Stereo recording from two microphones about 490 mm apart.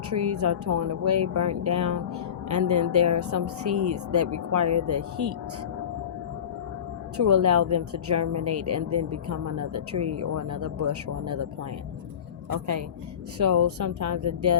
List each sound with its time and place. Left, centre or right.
0.1 s a woman's voice: right
7.2 s a woman's voice: right
12.5 s a woman's voice: right